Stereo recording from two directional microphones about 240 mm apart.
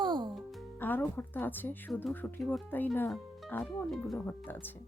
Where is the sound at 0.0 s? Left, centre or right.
Centre.